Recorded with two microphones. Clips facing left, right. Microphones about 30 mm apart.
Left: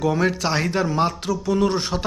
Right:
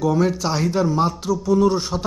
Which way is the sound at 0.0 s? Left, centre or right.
Left.